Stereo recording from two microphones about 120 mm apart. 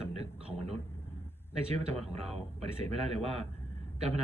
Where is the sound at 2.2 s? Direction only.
60° right (ahead or behind).